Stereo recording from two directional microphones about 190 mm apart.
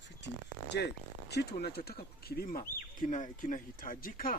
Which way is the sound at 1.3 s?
60° left (ahead or behind).